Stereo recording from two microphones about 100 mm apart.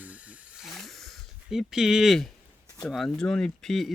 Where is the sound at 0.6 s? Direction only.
Centre (ahead or behind).